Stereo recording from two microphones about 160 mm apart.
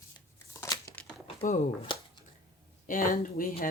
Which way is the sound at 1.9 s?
30° left (ahead or behind).